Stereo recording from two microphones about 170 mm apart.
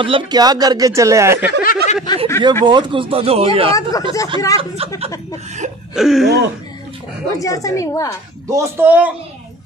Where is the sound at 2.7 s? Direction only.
30° right (ahead or behind).